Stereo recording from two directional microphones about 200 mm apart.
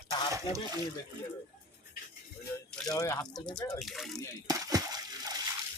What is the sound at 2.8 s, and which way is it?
Speech, 15° left (ahead or behind).